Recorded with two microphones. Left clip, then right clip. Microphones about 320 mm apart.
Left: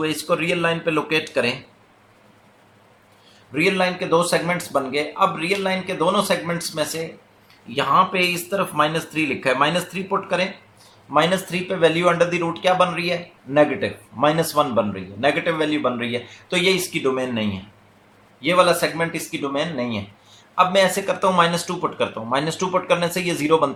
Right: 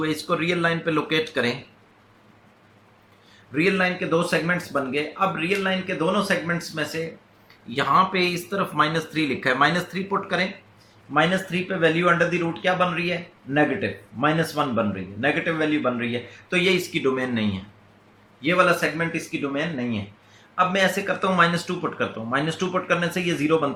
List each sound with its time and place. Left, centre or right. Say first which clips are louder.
0.0 s speech: left 3 dB; centre
3.5 s speech: left 2 dB; centre
11.8 s speech: left 3 dB; centre